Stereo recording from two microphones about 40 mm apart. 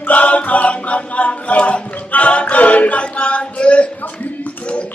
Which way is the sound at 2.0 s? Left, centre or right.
Left.